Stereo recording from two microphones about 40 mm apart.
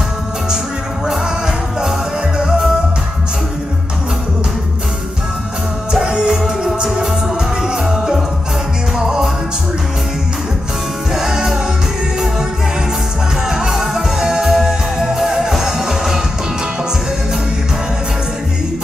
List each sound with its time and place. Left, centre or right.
2.3 s music: centre
6.0 s music: centre
11.1 s music: centre
13.5 s music: centre